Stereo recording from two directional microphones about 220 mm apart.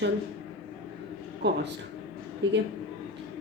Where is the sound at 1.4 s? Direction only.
50° right (ahead or behind).